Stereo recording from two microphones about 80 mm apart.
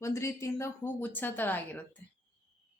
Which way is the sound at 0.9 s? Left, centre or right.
Left.